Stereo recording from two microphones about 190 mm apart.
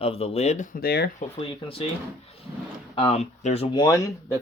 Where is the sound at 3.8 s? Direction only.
20° left (ahead or behind).